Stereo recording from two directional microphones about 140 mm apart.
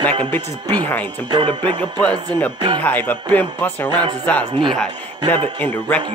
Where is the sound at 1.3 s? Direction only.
35° right (ahead or behind).